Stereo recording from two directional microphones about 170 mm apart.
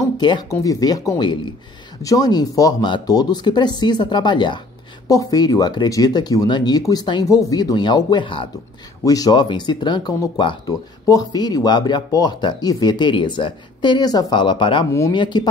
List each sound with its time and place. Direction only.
0.0 s speech: 20° left (ahead or behind)